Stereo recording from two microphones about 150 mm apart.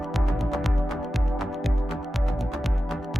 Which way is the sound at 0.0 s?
Centre (ahead or behind).